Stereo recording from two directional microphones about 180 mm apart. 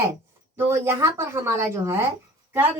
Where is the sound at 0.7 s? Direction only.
15° right (ahead or behind).